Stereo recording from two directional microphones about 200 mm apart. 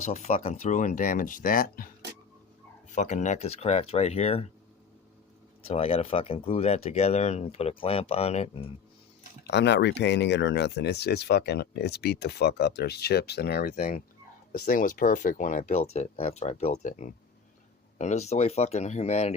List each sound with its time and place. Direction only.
0.0 s speech: 35° left (ahead or behind)
2.9 s speech: 40° left (ahead or behind)
5.6 s speech: 30° left (ahead or behind)
9.5 s speech: 60° left (ahead or behind); by 19.3 s 35° left (ahead or behind)